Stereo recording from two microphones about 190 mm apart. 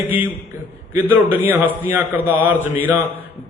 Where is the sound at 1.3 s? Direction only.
10° right (ahead or behind).